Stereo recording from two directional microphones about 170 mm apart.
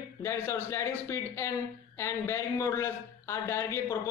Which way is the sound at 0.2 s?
15° left (ahead or behind).